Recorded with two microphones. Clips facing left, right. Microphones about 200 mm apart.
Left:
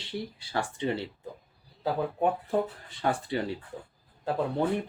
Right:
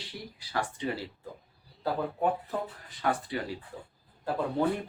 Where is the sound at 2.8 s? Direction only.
30° left (ahead or behind).